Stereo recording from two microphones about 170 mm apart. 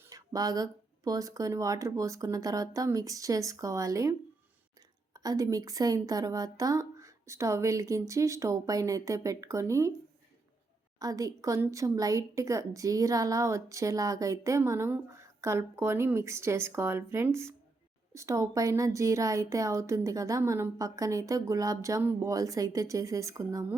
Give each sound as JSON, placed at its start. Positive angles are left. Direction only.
{"t": 0.1, "sound": "a woman's voice", "side_deg": -20}
{"t": 5.1, "sound": "a woman's voice", "side_deg": -20}
{"t": 11.0, "sound": "a woman's voice", "side_deg": -20}